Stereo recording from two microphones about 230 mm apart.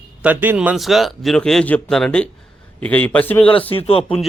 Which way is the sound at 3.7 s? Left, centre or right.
Left.